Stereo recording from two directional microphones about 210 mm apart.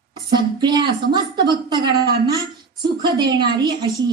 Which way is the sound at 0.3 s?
20° right (ahead or behind).